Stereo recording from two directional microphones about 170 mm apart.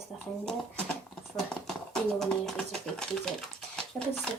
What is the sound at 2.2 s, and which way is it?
Speech, centre (ahead or behind).